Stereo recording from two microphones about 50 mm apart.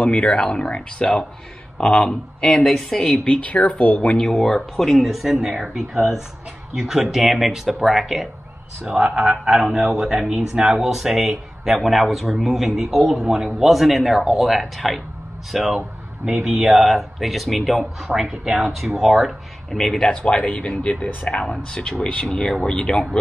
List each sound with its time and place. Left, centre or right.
0.0 s speech: left; by 3.3 s centre
3.3 s speech: left
4.2 s speech: centre
8.8 s speech: centre
9.9 s speech: centre
18.4 s speech: centre
18.8 s speech: centre